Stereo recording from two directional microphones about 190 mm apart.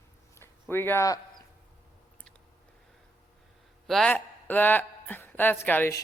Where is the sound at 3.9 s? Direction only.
5° left (ahead or behind).